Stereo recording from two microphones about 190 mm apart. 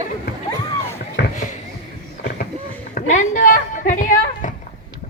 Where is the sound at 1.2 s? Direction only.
60° left (ahead or behind).